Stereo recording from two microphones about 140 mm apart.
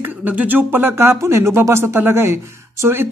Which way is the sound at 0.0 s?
10° right (ahead or behind).